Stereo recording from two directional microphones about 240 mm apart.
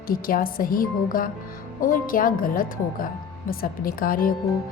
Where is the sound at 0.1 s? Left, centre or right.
Left.